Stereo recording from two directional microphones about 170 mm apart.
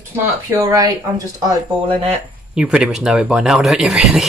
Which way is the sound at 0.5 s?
20° right (ahead or behind).